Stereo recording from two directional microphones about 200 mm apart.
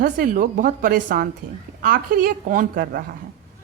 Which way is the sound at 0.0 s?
45° right (ahead or behind).